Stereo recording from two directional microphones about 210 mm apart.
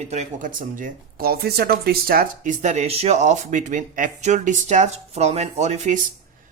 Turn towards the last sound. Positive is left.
turn(degrees=-35)  # may be behind; listen again after turning